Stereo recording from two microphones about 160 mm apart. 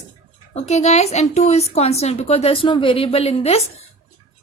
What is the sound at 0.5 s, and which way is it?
A woman's voice, 45° left (ahead or behind).